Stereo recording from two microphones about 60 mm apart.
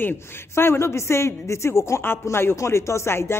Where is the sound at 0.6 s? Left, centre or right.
Left.